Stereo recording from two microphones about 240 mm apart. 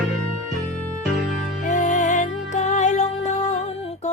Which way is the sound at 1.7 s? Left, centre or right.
Left.